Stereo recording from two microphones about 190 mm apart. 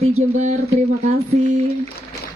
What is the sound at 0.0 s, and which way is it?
Speech, 35° right (ahead or behind).